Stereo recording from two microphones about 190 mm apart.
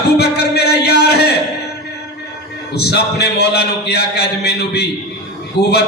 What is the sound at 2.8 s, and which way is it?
Music, 60° left (ahead or behind).